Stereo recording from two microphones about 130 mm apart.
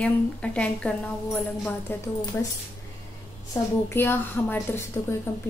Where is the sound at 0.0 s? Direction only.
10° left (ahead or behind).